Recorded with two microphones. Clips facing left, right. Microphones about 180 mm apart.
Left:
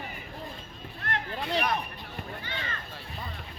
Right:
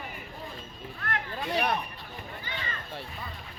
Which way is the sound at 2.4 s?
65° left (ahead or behind).